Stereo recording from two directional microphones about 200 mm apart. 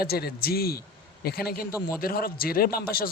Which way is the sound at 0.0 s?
50° left (ahead or behind).